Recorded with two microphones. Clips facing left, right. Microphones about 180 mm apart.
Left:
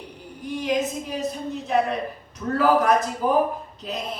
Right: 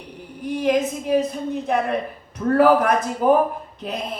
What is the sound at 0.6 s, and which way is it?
A woman's voice, 55° right (ahead or behind).